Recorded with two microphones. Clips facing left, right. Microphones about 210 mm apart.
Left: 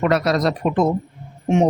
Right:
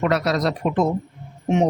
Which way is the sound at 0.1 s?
50° left (ahead or behind).